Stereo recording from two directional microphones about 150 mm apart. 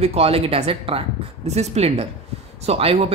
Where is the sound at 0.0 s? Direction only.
40° right (ahead or behind).